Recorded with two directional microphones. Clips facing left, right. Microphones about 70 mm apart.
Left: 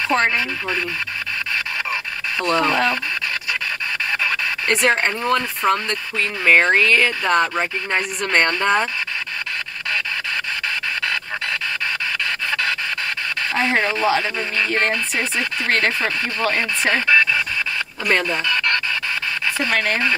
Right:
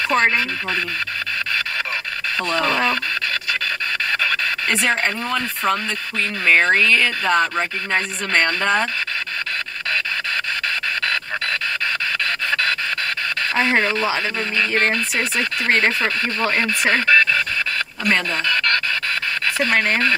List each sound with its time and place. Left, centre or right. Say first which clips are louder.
0.1 s speech: right 1 dB; centre
0.4 s speech: even; centre
2.4 s speech: left 3 dB; centre
4.6 s speech: left 3 dB; centre
13.6 s a sound: right 1 dB; centre
16.0 s speech: right 1 dB; centre
16.8 s speech: even; centre
19.7 s speech: right 2 dB; centre